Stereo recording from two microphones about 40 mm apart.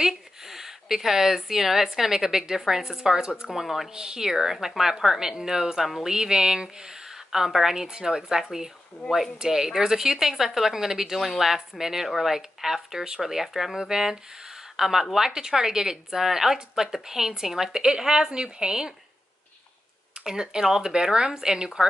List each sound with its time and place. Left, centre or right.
0.0 s a woman's voice: centre
3.4 s speech: centre
3.9 s a woman's voice: centre
20.2 s speech: centre